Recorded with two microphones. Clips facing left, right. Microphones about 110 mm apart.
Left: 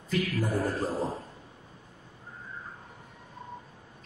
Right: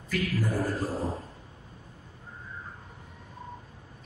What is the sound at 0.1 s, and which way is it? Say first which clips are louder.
Speech: left 1 dB; 25° left (ahead or behind).